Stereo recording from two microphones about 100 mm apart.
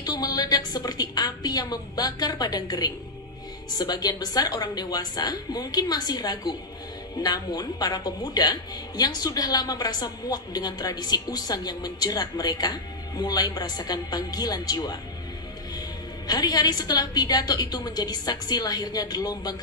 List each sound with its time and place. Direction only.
0.0 s a woman's voice: 40° left (ahead or behind)
16.3 s a woman's voice: 40° left (ahead or behind)